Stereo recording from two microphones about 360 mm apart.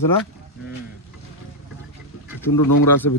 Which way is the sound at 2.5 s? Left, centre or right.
Left.